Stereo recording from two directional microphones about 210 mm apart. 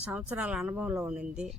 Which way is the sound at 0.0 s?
5° right (ahead or behind).